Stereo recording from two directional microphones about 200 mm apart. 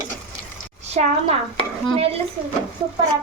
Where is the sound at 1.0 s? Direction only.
35° right (ahead or behind).